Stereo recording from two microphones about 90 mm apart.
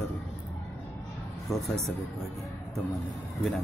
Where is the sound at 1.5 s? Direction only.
5° left (ahead or behind).